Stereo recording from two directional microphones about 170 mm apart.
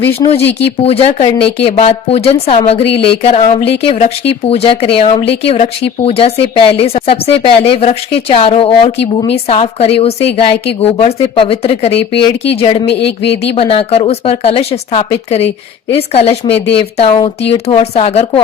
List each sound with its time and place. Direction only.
0.2 s speech: 35° left (ahead or behind)